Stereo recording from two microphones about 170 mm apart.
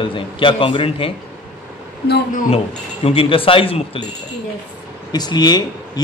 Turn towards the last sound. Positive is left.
turn(degrees=25)  # may be behind; listen again after turning